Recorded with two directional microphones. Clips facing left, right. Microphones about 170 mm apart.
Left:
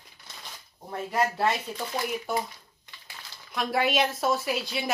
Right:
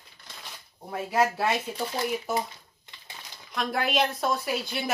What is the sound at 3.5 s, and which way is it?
A woman's voice, centre (ahead or behind).